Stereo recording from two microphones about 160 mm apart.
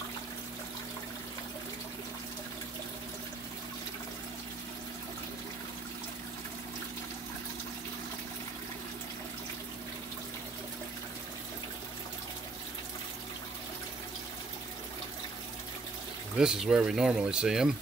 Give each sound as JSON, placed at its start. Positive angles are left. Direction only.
{"t": 16.3, "sound": "speech", "side_deg": -5}